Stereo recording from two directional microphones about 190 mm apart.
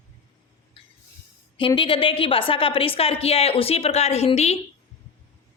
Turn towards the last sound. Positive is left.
turn(degrees=35)  # may be behind; listen again after turning